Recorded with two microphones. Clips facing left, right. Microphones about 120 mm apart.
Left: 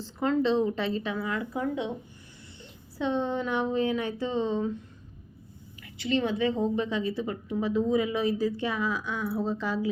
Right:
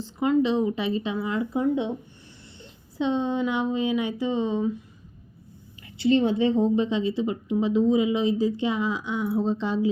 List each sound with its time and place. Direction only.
0.0 s a woman's voice: 15° right (ahead or behind)
3.0 s speech: 20° right (ahead or behind)
6.0 s a woman's voice: 30° right (ahead or behind)